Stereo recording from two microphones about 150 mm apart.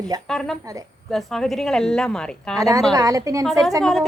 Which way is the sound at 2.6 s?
25° right (ahead or behind).